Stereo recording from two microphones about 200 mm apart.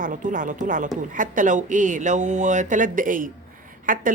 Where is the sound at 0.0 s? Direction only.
40° right (ahead or behind).